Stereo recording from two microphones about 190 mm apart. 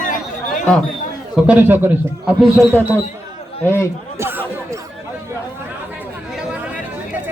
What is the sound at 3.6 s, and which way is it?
Speech, 10° left (ahead or behind).